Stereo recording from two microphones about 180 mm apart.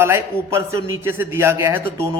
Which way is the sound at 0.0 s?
15° right (ahead or behind).